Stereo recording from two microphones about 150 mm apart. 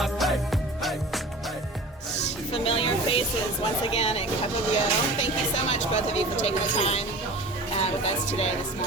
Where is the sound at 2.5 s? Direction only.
40° left (ahead or behind).